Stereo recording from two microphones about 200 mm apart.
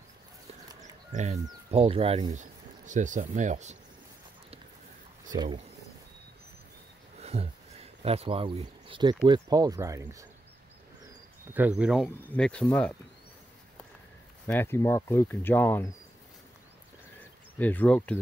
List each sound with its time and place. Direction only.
1.1 s speech: 35° right (ahead or behind)
5.3 s speech: 20° right (ahead or behind)
7.2 s speech: 30° right (ahead or behind); by 10.2 s 15° right (ahead or behind)
11.5 s speech: 5° right (ahead or behind)
14.5 s speech: 10° left (ahead or behind)
17.6 s speech: 10° left (ahead or behind)